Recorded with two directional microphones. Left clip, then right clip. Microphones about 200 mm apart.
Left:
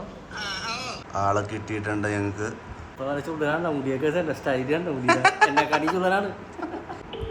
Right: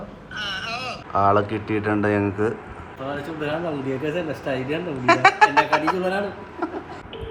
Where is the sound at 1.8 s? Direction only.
Centre (ahead or behind).